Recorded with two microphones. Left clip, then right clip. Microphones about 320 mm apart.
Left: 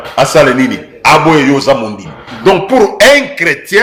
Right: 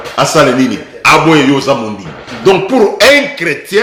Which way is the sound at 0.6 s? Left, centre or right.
Centre.